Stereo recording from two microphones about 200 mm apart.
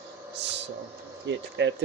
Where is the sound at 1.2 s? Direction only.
65° right (ahead or behind).